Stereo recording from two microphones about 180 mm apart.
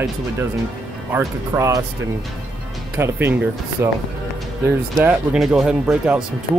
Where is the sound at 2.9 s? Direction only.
10° right (ahead or behind).